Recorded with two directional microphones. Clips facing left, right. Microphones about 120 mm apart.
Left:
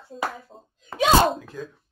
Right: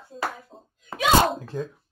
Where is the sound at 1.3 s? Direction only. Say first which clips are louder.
Right 5 dB; 30° right (ahead or behind).